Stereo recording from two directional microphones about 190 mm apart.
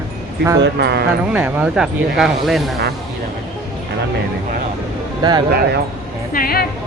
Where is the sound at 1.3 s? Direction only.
5° right (ahead or behind).